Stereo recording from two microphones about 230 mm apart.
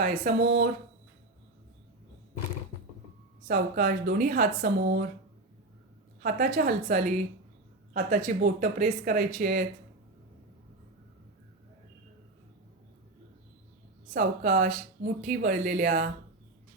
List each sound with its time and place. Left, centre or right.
0.0 s speech: right
3.4 s speech: right
6.2 s speech: right
14.1 s speech: right